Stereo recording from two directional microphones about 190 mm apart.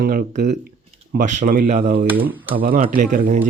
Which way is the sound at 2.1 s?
10° right (ahead or behind).